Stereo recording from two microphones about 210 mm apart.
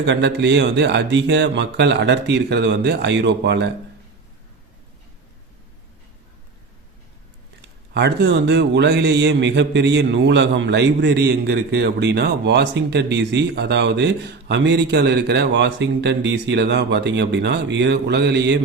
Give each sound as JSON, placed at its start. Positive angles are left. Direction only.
{"t": 0.0, "sound": "speech", "side_deg": -55}
{"t": 7.9, "sound": "speech", "side_deg": -55}